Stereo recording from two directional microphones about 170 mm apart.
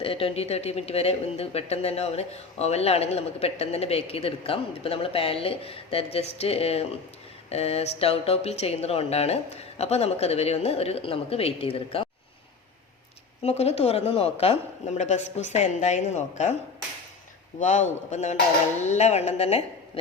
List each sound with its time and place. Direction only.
0.0 s speech: 35° left (ahead or behind)
13.4 s speech: 40° left (ahead or behind)
17.6 s a man's voice: 45° left (ahead or behind)